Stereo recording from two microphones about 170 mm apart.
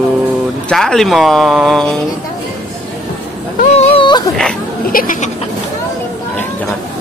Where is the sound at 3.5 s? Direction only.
35° left (ahead or behind).